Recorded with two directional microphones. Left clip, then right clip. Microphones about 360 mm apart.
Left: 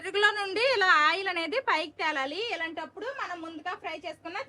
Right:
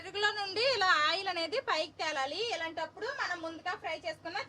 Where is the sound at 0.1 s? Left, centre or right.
Centre.